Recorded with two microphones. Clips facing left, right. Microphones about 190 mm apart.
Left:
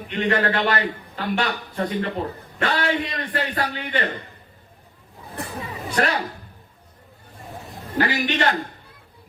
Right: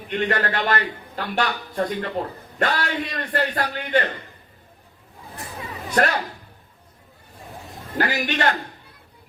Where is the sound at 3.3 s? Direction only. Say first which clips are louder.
Right 3 dB; 40° right (ahead or behind).